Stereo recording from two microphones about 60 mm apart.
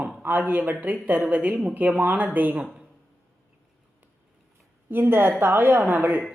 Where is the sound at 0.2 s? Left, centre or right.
Right.